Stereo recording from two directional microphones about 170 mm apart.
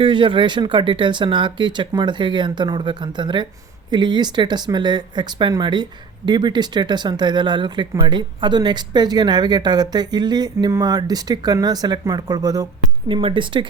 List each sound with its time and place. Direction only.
0.0 s speech: 30° right (ahead or behind)